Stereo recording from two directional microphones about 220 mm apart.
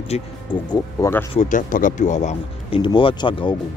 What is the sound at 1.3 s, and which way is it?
Speech, 35° left (ahead or behind).